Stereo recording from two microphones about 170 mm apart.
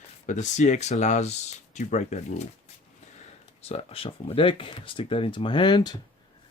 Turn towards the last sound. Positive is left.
turn(degrees=25)  # may be behind; listen again after turning